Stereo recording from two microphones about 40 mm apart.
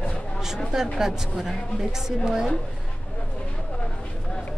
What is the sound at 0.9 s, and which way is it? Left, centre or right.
A woman's voice, centre.